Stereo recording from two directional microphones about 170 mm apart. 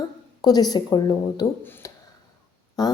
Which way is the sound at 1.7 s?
10° left (ahead or behind).